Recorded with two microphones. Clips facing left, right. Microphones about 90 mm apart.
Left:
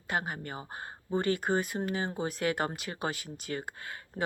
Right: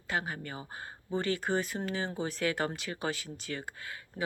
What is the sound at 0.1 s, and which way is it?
Speech, 30° left (ahead or behind).